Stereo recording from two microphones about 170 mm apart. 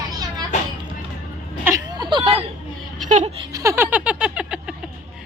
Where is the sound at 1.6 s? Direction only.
20° right (ahead or behind).